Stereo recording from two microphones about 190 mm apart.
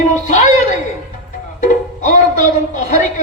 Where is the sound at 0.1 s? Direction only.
40° left (ahead or behind).